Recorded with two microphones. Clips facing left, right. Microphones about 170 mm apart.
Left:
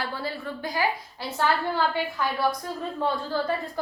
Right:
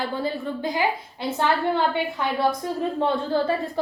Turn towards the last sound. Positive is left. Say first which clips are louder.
# right 4 dB
turn(degrees=-20)  # may be behind; listen again after turning